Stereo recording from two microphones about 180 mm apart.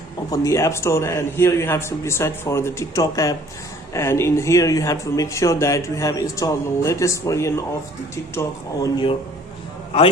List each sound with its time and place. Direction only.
0.3 s speech: 15° left (ahead or behind)